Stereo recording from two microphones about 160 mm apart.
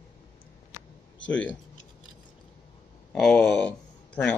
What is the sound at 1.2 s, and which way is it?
Speech, 10° left (ahead or behind).